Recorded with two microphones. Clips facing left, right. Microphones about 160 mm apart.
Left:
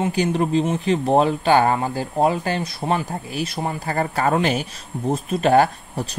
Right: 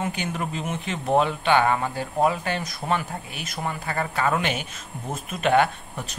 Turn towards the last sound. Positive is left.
turn(degrees=35)  # may be behind; listen again after turning